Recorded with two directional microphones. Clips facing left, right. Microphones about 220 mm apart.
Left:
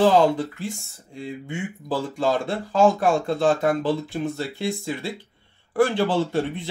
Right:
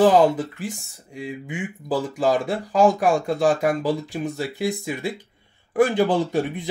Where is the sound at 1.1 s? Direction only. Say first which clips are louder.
Right 1 dB; 15° right (ahead or behind).